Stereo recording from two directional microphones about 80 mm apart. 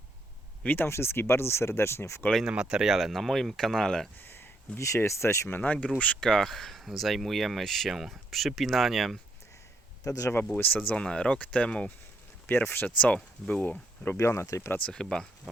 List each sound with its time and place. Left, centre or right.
0.6 s speech: left
2.5 s speech: centre
4.2 s speech: left
5.5 s speech: centre
10.0 s speech: left
10.4 s speech: centre
14.2 s speech: left
14.8 s speech: centre